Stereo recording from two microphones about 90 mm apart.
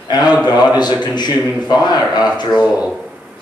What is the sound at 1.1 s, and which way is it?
A man's voice, 50° left (ahead or behind).